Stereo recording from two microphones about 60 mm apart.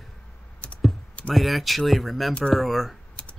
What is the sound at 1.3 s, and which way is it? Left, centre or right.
Speech, centre.